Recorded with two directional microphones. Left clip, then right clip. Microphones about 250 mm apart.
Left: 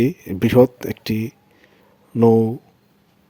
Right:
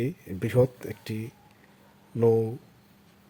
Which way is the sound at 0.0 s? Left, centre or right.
Left.